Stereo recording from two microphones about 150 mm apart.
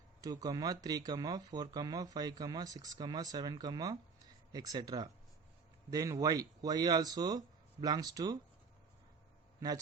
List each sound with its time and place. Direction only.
0.2 s speech: 25° right (ahead or behind)